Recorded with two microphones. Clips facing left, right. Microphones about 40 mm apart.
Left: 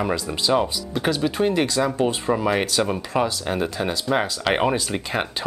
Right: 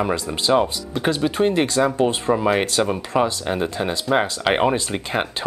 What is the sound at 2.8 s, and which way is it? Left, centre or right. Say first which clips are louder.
Speech: right 2 dB; centre.